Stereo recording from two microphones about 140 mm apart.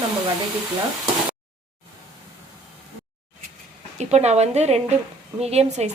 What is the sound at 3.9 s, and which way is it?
A woman's voice, 50° right (ahead or behind).